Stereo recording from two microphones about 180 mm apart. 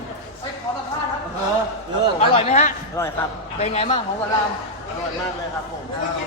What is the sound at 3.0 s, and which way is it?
Speech, 20° left (ahead or behind).